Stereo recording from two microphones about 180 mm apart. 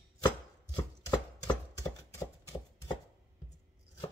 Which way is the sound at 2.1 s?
20° left (ahead or behind).